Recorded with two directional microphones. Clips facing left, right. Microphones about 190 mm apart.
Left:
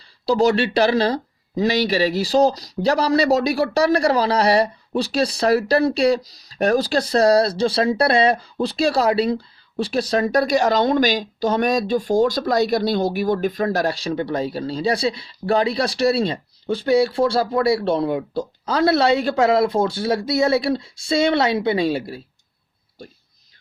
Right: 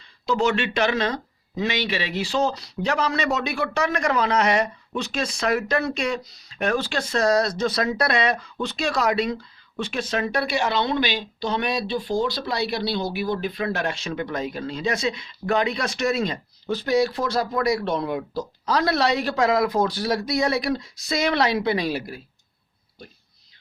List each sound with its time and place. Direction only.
0.3 s speech: 35° left (ahead or behind)